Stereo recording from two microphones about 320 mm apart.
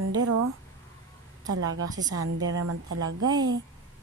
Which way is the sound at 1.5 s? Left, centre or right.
Right.